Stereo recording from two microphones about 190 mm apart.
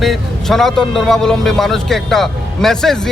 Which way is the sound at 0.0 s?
Centre (ahead or behind).